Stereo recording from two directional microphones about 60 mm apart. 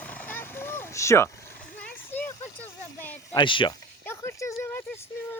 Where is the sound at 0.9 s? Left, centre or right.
Left.